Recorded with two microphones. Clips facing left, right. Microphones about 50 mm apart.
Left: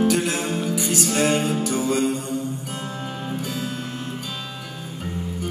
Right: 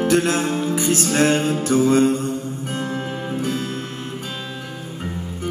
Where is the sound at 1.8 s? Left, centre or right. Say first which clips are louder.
Right 6 dB; right.